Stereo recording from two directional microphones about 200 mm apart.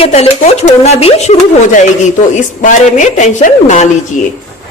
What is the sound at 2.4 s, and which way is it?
A woman's voice, 40° left (ahead or behind).